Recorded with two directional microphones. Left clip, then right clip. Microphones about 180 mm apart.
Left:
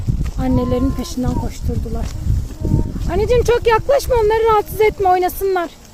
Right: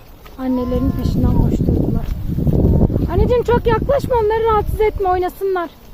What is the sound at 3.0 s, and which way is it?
Speech, centre (ahead or behind).